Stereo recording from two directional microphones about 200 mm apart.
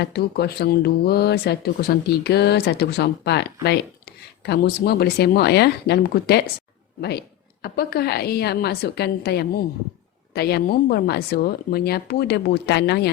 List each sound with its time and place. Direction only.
0.0 s a woman's voice: 55° left (ahead or behind)